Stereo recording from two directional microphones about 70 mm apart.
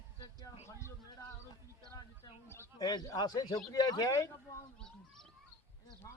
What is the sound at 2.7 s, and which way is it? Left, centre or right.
Speech, left.